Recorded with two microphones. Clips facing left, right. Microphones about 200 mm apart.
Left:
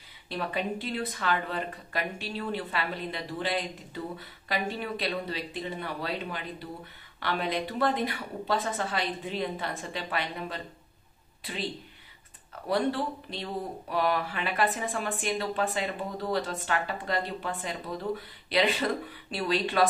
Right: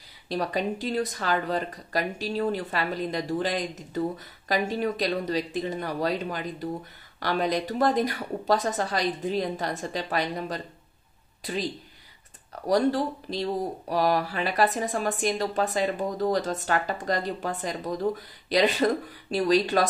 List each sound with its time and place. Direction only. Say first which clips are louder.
0.3 s speech: right 4 dB; 40° right (ahead or behind)